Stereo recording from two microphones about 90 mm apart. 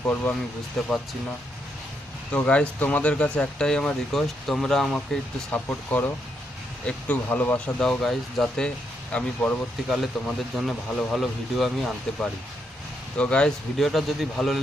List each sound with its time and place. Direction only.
0.0 s speech: 20° left (ahead or behind)
0.8 s speech: 5° left (ahead or behind)
2.3 s speech: 15° left (ahead or behind)
5.5 s speech: 20° left (ahead or behind)
7.3 s speech: 20° left (ahead or behind)
7.8 s speech: 5° left (ahead or behind)
9.1 s speech: 15° left (ahead or behind)
9.9 s speech: centre (ahead or behind)
13.1 s speech: 10° left (ahead or behind)